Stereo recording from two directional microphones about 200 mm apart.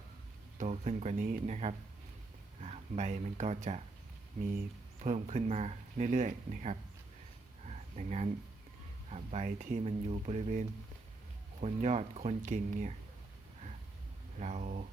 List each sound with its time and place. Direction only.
0.6 s speech: 35° right (ahead or behind)
7.7 s a sound: 35° right (ahead or behind)
9.0 s speech: 35° right (ahead or behind)
14.3 s speech: 35° right (ahead or behind)